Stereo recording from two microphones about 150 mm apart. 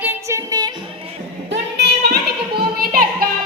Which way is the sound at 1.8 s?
90° right.